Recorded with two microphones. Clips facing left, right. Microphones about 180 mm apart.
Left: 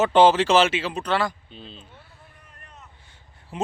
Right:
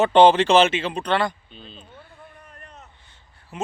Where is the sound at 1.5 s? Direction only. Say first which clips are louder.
Left 1 dB; 30° left (ahead or behind).